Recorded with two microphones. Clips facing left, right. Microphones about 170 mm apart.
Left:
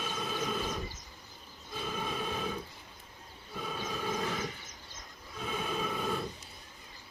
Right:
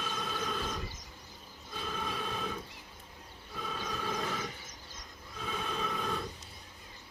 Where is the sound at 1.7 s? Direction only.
5° left (ahead or behind).